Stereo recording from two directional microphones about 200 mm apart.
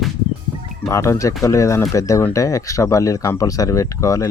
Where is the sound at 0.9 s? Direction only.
15° left (ahead or behind).